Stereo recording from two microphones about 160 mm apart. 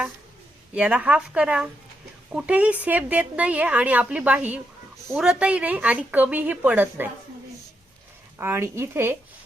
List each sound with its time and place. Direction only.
0.7 s a woman's voice: 5° right (ahead or behind)
8.4 s a woman's voice: 15° right (ahead or behind)